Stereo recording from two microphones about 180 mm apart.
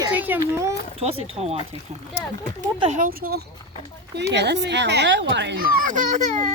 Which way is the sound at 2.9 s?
50° right (ahead or behind).